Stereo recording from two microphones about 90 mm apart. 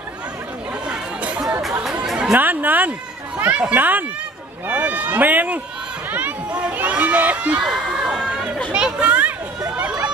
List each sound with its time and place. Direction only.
0.8 s chatter: 15° right (ahead or behind)
2.3 s speech: 20° right (ahead or behind)
9.8 s run: 10° right (ahead or behind)